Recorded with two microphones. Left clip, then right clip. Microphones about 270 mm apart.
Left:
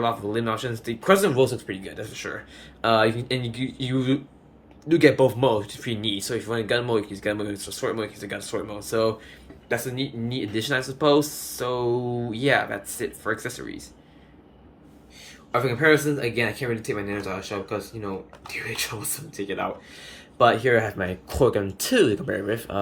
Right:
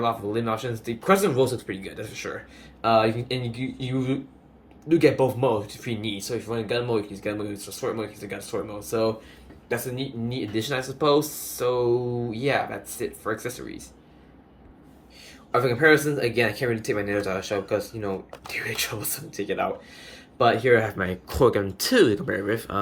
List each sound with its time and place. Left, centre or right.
0.0 s speech: centre
15.5 s speech: centre